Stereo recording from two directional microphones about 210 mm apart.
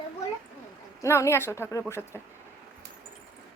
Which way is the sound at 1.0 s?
15° left (ahead or behind).